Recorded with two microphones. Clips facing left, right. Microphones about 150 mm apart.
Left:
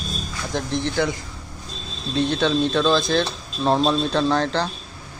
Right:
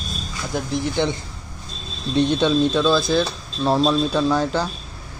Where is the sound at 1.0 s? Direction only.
30° right (ahead or behind).